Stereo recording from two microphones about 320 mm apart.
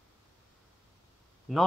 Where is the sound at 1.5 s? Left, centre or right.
Centre.